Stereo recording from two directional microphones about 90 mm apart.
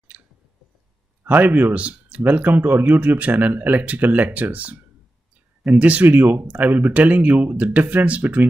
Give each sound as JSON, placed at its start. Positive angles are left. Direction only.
{"t": 0.1, "sound": "chewing", "side_deg": -15}
{"t": 1.2, "sound": "speech", "side_deg": -20}